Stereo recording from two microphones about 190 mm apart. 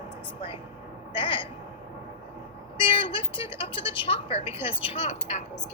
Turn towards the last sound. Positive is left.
turn(degrees=35)  # may be behind; listen again after turning